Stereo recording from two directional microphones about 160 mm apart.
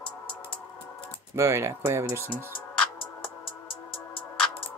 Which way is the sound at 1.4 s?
15° right (ahead or behind).